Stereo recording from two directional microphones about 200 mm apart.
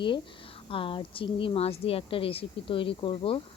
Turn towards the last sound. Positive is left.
turn(degrees=25)  # may be behind; listen again after turning